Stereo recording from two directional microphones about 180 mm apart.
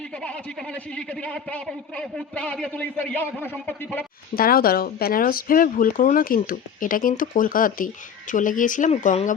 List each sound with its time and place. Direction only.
0.2 s a woman's voice: 5° left (ahead or behind)
4.4 s speech: 55° left (ahead or behind)